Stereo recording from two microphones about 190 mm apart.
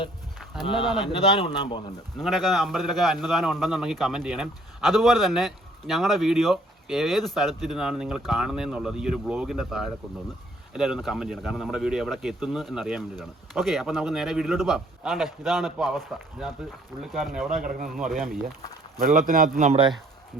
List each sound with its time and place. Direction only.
1.5 s speech: 25° left (ahead or behind)
2.1 s a man's voice: centre (ahead or behind)
18.9 s speech: 45° right (ahead or behind)